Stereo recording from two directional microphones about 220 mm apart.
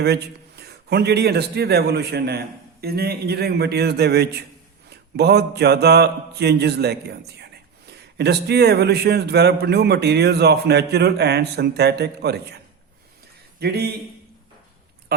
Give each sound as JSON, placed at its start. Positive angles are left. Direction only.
{"t": 0.0, "sound": "a man's voice", "side_deg": -50}
{"t": 13.6, "sound": "a man's voice", "side_deg": -45}